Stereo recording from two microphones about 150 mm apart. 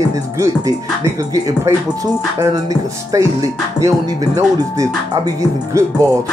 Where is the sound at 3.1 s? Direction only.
20° right (ahead or behind).